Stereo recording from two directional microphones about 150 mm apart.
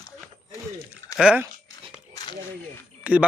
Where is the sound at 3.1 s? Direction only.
10° right (ahead or behind).